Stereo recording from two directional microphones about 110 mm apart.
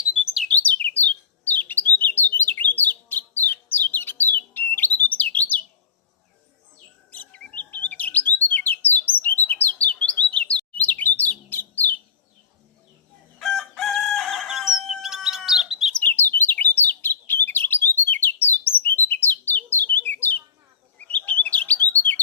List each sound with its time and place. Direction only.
0.4 s bird: 15° left (ahead or behind)
7.1 s bird: 15° left (ahead or behind)
13.4 s crowing: centre (ahead or behind)
16.0 s bird: 20° left (ahead or behind)